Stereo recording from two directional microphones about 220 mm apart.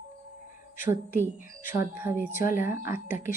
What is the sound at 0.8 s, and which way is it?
Speech, 10° right (ahead or behind).